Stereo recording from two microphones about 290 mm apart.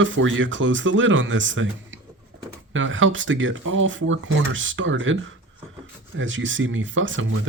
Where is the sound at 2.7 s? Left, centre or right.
Right.